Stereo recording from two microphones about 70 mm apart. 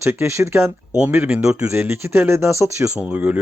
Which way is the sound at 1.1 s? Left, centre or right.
Right.